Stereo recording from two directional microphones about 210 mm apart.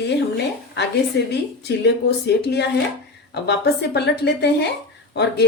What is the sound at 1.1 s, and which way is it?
Speech, 55° left (ahead or behind).